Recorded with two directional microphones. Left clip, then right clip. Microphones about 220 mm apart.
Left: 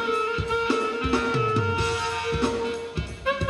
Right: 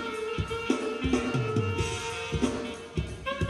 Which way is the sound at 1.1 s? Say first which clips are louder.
Left 7 dB; 15° left (ahead or behind).